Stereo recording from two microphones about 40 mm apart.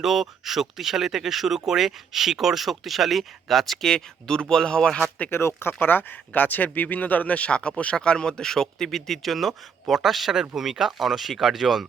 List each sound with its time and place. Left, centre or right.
0.0 s speech: centre
5.3 s speech: left
7.9 s speech: centre